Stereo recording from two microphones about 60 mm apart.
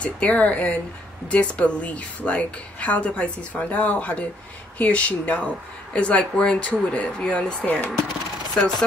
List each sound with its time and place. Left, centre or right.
0.0 s a woman's voice: left
7.6 s a woman's voice: left